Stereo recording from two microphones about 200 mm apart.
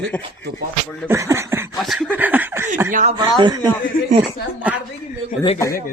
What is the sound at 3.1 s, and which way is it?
Speech, 20° right (ahead or behind).